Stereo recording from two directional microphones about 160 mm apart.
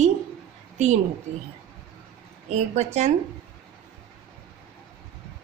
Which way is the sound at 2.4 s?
45° right (ahead or behind).